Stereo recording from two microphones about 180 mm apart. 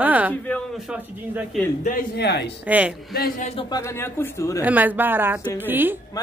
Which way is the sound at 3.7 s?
15° left (ahead or behind).